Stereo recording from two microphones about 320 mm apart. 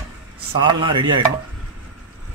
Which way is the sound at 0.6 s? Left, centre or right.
Centre.